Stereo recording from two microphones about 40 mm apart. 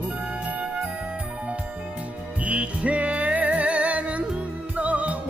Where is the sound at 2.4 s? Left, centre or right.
Right.